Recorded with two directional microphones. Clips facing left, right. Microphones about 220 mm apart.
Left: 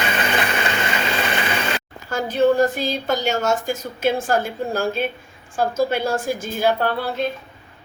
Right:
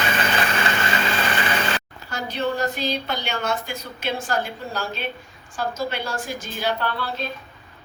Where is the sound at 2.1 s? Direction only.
50° left (ahead or behind).